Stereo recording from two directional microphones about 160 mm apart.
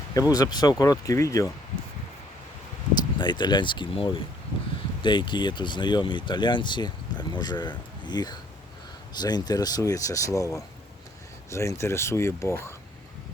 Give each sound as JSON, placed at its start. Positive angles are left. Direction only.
{"t": 0.1, "sound": "speech", "side_deg": 20}
{"t": 3.2, "sound": "speech", "side_deg": 30}